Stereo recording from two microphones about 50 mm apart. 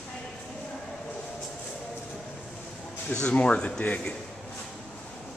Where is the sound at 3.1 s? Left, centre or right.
Left.